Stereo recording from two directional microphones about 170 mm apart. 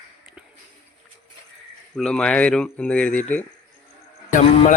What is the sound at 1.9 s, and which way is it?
Speech, 5° left (ahead or behind).